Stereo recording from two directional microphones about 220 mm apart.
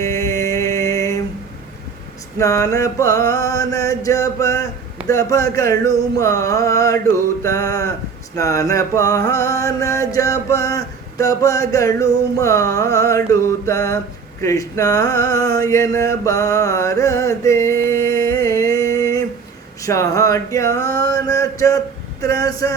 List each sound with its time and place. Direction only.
0.0 s music: 15° left (ahead or behind)
2.4 s mantra: 15° left (ahead or behind)
18.1 s a sound: 15° left (ahead or behind)
22.2 s mantra: 15° left (ahead or behind)